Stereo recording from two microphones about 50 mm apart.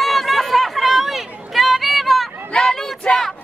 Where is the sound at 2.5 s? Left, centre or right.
Left.